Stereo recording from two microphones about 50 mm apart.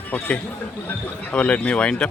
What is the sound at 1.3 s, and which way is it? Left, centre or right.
Speech, left.